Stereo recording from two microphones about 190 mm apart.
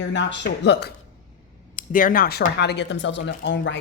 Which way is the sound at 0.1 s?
70° left (ahead or behind).